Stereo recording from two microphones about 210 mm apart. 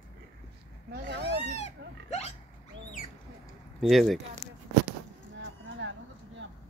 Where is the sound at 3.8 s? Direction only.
Centre (ahead or behind).